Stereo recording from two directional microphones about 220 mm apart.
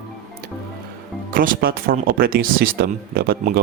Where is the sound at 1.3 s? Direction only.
40° right (ahead or behind).